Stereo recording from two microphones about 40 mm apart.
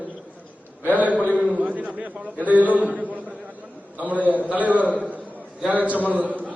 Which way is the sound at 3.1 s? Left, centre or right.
Right.